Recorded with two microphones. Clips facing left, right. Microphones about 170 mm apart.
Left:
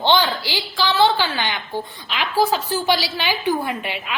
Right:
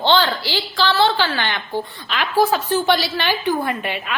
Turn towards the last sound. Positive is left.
turn(degrees=10)  # may be behind; listen again after turning